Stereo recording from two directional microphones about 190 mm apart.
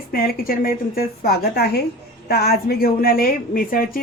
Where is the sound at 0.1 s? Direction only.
50° left (ahead or behind).